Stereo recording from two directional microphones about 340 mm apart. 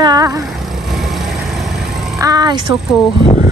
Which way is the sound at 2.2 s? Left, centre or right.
Centre.